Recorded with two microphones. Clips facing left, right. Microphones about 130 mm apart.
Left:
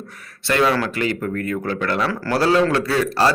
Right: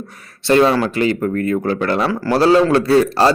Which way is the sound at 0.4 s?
30° right (ahead or behind).